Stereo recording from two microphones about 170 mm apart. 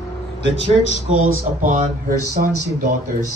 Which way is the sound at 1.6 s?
50° right (ahead or behind).